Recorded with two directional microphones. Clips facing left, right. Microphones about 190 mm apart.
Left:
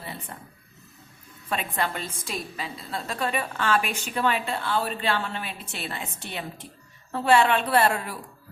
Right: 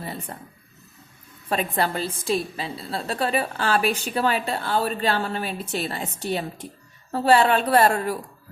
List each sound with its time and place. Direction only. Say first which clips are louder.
0.3 s a woman's voice: right 3 dB; 40° right (ahead or behind)